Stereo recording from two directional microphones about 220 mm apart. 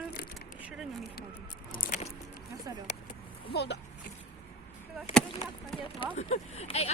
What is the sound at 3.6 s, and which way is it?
Speech, 50° left (ahead or behind).